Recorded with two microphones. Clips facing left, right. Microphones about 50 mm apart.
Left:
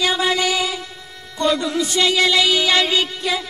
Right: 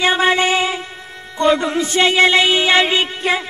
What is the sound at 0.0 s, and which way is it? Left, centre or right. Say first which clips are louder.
Music: right 4 dB; right.